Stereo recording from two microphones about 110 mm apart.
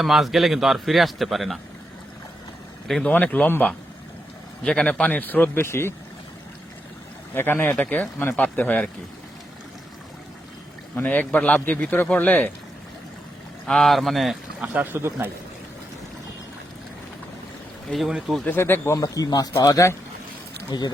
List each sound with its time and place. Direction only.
0.0 s a man's voice: centre (ahead or behind)
2.8 s a man's voice: 5° left (ahead or behind); by 5.9 s 25° left (ahead or behind)
7.3 s a man's voice: 20° left (ahead or behind)
10.9 s a man's voice: 15° left (ahead or behind)
13.7 s a man's voice: 5° left (ahead or behind)
14.6 s speech: 10° right (ahead or behind)
14.9 s a man's voice: 25° right (ahead or behind)
17.9 s a man's voice: centre (ahead or behind)
18.4 s speech: 20° left (ahead or behind)
18.9 s speech: 35° left (ahead or behind)